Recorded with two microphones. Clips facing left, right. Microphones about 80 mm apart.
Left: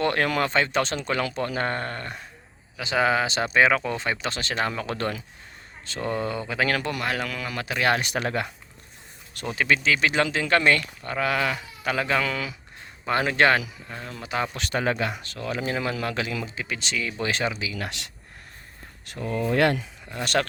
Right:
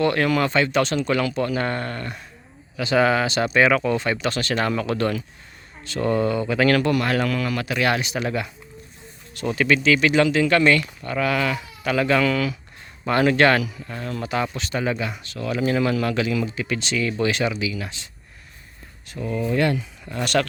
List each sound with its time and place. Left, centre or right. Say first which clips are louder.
0.0 s speech: right 4 dB; left
2.7 s speech: right 4 dB; centre
7.1 s speech: right 7 dB; centre
7.4 s speech: right 2 dB; left
8.0 s speech: right 1 dB; left
9.6 s speech: right 4 dB; left
13.8 s speech: right 7 dB; centre
14.5 s speech: right 1 dB; left
16.7 s speech: right 5 dB; centre
17.2 s speech: right 3 dB; left
17.7 s speech: even; left
19.0 s speech: right 1 dB; left
20.2 s speech: right 3 dB; left